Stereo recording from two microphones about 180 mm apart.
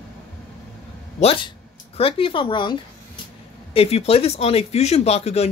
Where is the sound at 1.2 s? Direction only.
30° left (ahead or behind).